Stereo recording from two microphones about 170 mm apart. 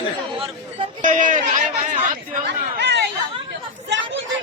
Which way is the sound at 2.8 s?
85° right.